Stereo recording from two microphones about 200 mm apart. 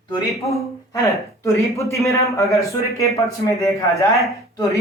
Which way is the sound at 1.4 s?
15° left (ahead or behind).